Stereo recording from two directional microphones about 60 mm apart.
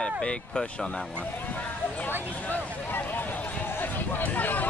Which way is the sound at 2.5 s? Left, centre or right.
Left.